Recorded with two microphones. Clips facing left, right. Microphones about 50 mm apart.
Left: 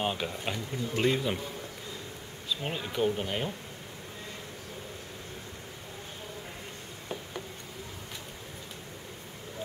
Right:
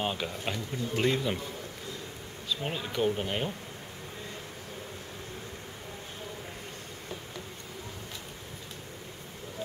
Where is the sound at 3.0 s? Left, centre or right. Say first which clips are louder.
Even; centre.